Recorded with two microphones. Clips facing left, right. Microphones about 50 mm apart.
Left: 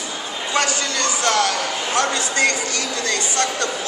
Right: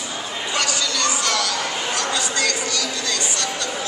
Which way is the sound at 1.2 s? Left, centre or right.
Left.